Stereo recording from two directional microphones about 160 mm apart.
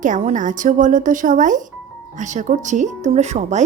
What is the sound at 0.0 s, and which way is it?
Speech, 50° right (ahead or behind).